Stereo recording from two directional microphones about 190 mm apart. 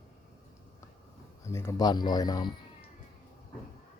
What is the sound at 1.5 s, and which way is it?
Speech, 15° left (ahead or behind).